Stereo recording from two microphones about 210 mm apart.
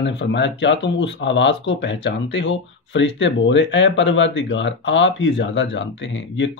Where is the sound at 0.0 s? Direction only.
60° left (ahead or behind).